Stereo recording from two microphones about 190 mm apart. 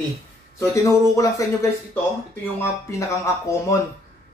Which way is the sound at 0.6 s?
15° left (ahead or behind).